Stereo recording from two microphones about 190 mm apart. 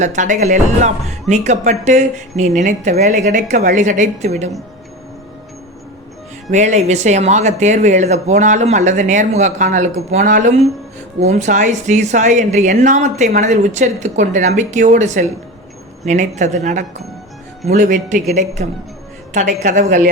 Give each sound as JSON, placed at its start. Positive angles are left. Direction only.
{"t": 0.0, "sound": "speech", "side_deg": -40}
{"t": 6.5, "sound": "speech", "side_deg": -40}